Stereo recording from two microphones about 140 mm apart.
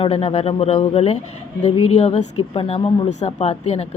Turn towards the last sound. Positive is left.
turn(degrees=50)  # may be behind; listen again after turning